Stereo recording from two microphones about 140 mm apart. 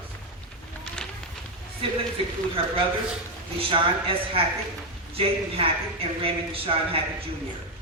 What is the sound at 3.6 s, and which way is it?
Speech, 40° right (ahead or behind).